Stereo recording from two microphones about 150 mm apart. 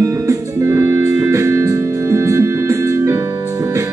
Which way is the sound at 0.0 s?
20° right (ahead or behind).